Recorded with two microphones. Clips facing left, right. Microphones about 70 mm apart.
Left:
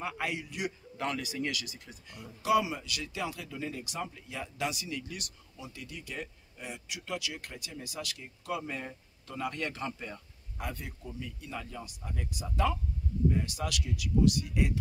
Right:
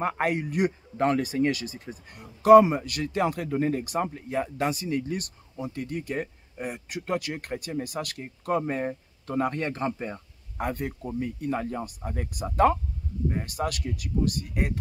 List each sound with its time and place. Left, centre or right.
0.0 s speech: right